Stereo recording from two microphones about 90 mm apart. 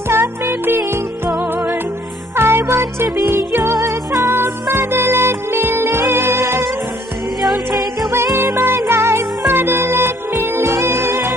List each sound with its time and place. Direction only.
0.1 s music: 25° right (ahead or behind)
8.1 s music: 30° right (ahead or behind)